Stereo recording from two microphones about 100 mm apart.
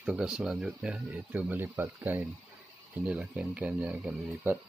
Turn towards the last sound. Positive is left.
turn(degrees=-15)  # may be behind; listen again after turning